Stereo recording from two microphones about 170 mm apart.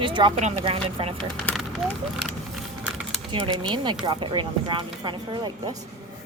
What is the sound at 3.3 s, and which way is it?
Speech, 30° right (ahead or behind).